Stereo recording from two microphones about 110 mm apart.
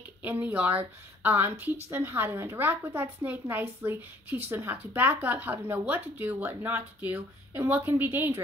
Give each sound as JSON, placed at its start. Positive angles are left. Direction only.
{"t": 0.2, "sound": "a woman's voice", "side_deg": -15}